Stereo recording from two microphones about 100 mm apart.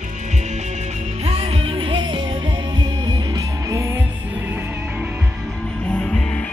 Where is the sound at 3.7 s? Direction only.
30° right (ahead or behind).